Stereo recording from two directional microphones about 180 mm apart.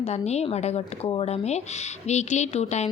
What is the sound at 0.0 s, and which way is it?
A woman's voice, 35° left (ahead or behind).